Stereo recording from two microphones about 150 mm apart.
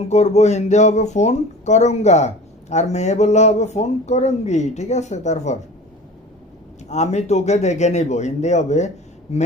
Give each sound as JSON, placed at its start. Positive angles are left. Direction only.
{"t": 0.1, "sound": "speech", "side_deg": 50}
{"t": 6.8, "sound": "speech", "side_deg": 50}